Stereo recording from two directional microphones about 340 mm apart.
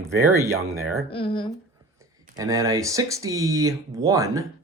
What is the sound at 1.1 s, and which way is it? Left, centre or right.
Speech, centre.